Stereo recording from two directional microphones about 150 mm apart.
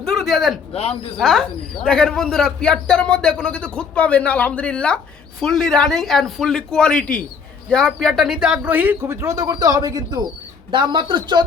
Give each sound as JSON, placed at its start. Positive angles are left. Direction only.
{"t": 0.0, "sound": "a sound", "side_deg": 0}
{"t": 0.7, "sound": "speech", "side_deg": 45}
{"t": 1.1, "sound": "a man's voice", "side_deg": 0}